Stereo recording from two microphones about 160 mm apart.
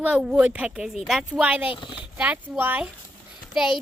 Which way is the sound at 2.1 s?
10° right (ahead or behind).